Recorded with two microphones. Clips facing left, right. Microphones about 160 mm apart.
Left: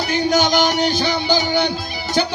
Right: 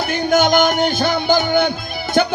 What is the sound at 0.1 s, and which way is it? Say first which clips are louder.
Music: right 2 dB; 50° right (ahead or behind).